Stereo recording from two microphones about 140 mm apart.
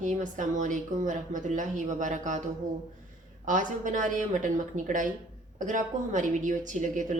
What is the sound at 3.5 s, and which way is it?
A woman's voice, 65° right (ahead or behind).